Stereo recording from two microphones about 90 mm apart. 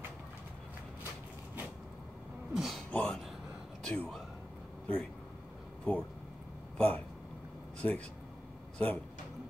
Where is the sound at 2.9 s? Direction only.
15° left (ahead or behind).